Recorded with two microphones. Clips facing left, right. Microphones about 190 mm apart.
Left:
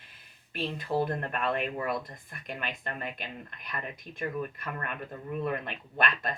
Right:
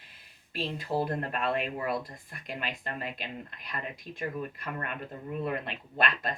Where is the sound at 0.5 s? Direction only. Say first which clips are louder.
Left 1 dB; 30° right (ahead or behind).